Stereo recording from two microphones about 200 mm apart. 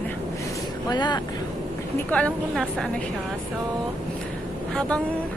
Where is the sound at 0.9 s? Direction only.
20° left (ahead or behind).